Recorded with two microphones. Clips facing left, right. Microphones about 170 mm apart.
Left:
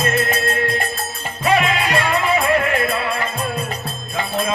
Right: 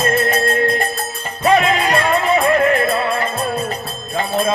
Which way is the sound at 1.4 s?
35° right (ahead or behind).